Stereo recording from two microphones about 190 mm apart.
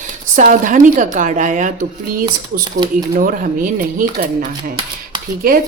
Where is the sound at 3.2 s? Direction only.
45° right (ahead or behind).